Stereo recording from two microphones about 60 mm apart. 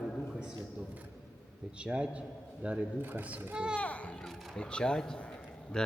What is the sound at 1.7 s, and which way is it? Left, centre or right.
A man's voice, centre.